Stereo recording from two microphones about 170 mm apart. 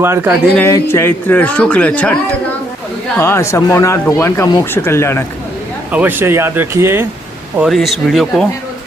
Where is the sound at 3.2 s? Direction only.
15° left (ahead or behind).